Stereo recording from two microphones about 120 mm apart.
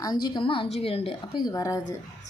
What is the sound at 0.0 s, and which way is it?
A woman's voice, 35° left (ahead or behind).